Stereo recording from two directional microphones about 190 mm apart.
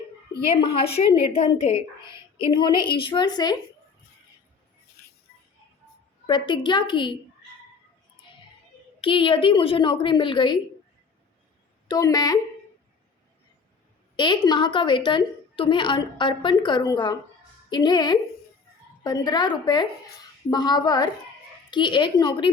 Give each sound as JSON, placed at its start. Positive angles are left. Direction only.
{"t": 0.5, "sound": "a woman's voice", "side_deg": 30}
{"t": 6.2, "sound": "a woman's voice", "side_deg": 25}
{"t": 9.0, "sound": "a woman's voice", "side_deg": 25}
{"t": 11.9, "sound": "a woman's voice", "side_deg": 20}
{"t": 14.2, "sound": "a woman's voice", "side_deg": 25}